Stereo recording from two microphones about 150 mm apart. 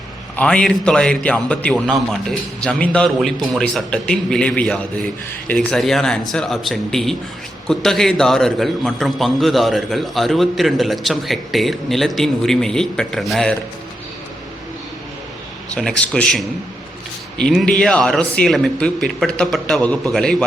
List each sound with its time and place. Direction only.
0.3 s a man's voice: 5° left (ahead or behind)
15.7 s a man's voice: 5° left (ahead or behind)